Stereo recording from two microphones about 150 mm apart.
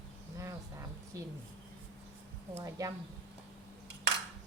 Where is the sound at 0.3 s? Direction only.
20° right (ahead or behind).